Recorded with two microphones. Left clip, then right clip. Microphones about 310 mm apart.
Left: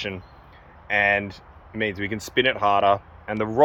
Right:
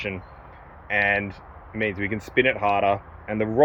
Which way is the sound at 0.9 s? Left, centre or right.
Centre.